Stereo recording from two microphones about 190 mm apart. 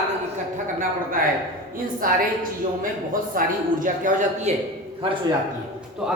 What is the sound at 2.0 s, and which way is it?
A man's voice, 45° right (ahead or behind).